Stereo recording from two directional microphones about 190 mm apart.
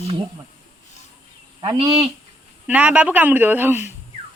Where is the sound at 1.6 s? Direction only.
25° right (ahead or behind).